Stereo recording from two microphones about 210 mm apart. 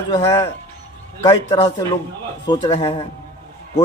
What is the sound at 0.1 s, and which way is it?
A man's voice, 20° left (ahead or behind).